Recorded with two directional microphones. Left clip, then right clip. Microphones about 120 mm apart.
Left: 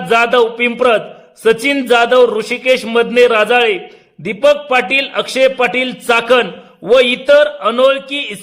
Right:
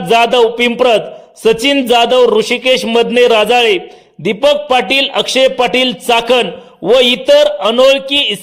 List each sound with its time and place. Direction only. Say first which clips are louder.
0.1 s a man's voice: right 2 dB; 20° right (ahead or behind)